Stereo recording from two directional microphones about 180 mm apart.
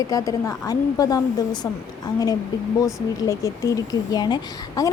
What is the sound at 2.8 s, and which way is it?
Speech, 15° left (ahead or behind).